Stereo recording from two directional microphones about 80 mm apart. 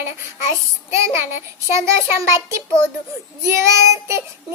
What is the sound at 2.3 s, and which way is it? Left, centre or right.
Child singing, right.